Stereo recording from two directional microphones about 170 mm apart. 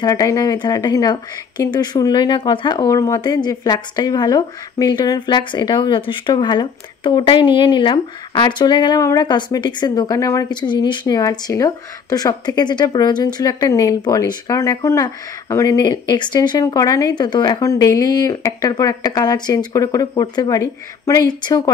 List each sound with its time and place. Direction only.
0.0 s a woman's voice: 20° left (ahead or behind)